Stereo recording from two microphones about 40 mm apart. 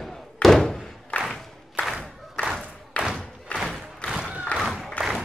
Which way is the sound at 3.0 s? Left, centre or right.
Left.